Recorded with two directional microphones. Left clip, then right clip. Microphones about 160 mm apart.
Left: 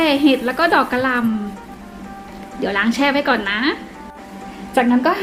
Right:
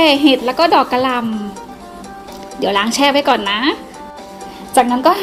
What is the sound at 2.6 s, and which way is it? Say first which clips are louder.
Speech: right 4 dB; 30° right (ahead or behind).